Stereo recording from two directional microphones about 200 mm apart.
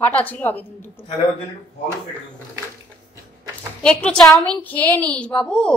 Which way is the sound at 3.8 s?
5° left (ahead or behind).